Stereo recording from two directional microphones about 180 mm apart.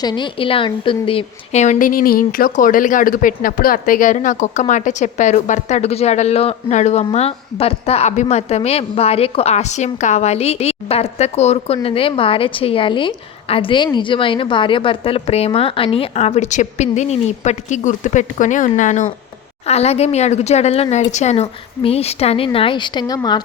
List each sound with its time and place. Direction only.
0.0 s a woman's voice: 25° left (ahead or behind)